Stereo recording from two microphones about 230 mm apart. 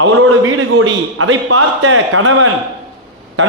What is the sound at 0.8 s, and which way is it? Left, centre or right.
A man's voice, right.